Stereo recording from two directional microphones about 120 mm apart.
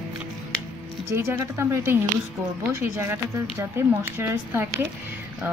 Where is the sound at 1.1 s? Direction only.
20° right (ahead or behind).